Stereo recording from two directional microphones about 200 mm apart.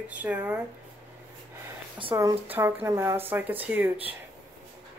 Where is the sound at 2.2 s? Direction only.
10° right (ahead or behind).